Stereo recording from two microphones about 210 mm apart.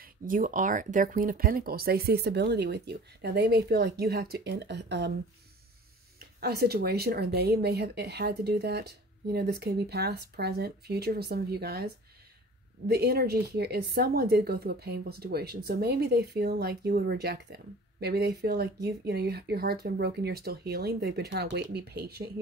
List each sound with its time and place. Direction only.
0.0 s speech: 40° right (ahead or behind)
6.1 s speech: 50° right (ahead or behind)